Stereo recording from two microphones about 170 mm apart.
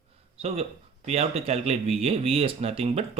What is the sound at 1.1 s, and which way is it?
Speech, 35° right (ahead or behind).